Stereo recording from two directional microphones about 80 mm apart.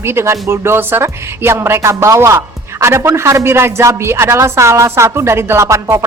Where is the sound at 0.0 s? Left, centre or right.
Right.